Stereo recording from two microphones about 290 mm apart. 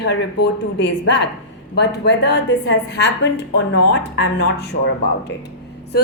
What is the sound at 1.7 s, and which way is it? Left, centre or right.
A woman's voice, left.